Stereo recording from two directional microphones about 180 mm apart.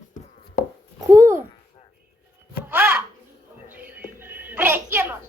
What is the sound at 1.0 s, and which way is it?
Babbling, 20° right (ahead or behind).